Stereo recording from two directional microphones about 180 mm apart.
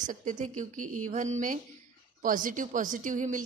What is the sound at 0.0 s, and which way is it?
A woman's voice, 45° right (ahead or behind).